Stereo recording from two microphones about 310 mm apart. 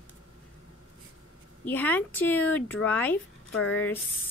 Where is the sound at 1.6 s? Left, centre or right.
Centre.